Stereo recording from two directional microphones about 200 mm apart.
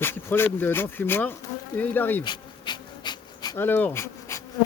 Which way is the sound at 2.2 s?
20° left (ahead or behind).